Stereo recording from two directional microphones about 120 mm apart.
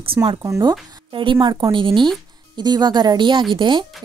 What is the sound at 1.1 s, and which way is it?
A woman's voice, 45° right (ahead or behind).